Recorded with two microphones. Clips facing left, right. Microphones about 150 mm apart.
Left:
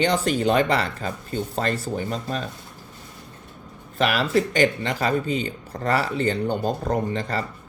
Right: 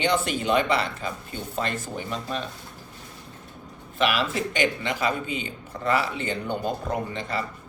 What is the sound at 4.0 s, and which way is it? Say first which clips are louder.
Speech: left 4 dB; 40° left (ahead or behind).